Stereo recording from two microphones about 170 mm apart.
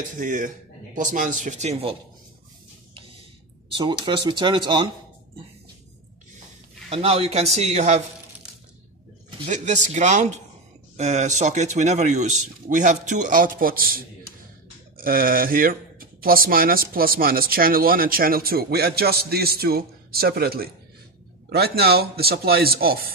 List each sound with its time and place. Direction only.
0.1 s speech: 50° right (ahead or behind)
3.0 s a sound: 30° right (ahead or behind)
6.9 s speech: 35° right (ahead or behind)
9.5 s speech: 45° right (ahead or behind); by 23.1 s 60° right (ahead or behind)